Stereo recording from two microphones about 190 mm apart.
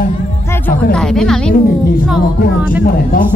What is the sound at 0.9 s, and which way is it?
Speech, 5° left (ahead or behind).